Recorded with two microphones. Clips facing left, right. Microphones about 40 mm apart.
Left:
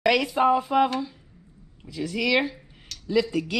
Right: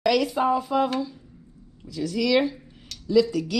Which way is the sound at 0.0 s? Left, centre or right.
Left.